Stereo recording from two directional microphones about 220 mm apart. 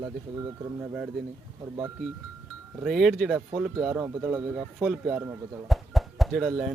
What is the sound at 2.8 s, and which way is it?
Speech, centre (ahead or behind).